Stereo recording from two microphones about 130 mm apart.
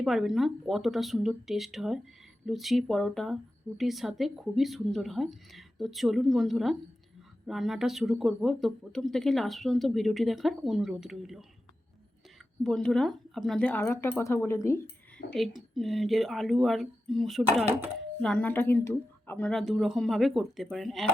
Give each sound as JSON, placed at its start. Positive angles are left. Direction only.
{"t": 0.0, "sound": "speech", "side_deg": 0}
{"t": 12.6, "sound": "speech", "side_deg": 5}
{"t": 13.8, "sound": "speech", "side_deg": 20}
{"t": 15.3, "sound": "speech", "side_deg": 0}